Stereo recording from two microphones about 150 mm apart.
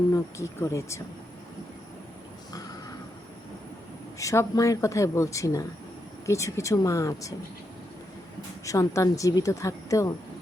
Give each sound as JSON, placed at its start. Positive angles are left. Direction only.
{"t": 0.1, "sound": "speech", "side_deg": 20}
{"t": 4.2, "sound": "speech", "side_deg": 20}
{"t": 8.6, "sound": "speech", "side_deg": 20}